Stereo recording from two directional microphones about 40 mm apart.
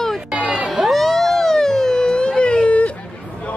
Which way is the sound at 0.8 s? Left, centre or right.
Centre.